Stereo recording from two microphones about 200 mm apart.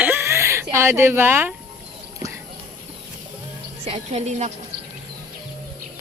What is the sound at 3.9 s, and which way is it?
Speech, 35° right (ahead or behind).